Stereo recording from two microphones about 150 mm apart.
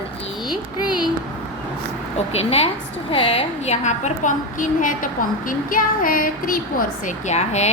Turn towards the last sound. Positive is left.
turn(degrees=50)  # may be behind; listen again after turning